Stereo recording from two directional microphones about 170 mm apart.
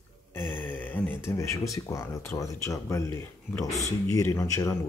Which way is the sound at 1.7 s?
20° left (ahead or behind).